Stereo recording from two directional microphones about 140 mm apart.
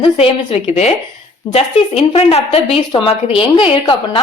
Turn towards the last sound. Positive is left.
turn(degrees=40)  # may be behind; listen again after turning